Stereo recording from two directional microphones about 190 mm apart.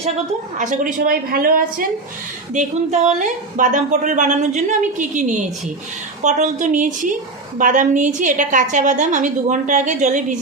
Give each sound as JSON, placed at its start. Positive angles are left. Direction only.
{"t": 0.6, "sound": "a woman's voice", "side_deg": -40}
{"t": 2.5, "sound": "a woman's voice", "side_deg": -40}